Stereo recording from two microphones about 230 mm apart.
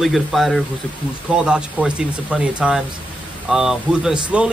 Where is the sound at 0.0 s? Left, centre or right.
Centre.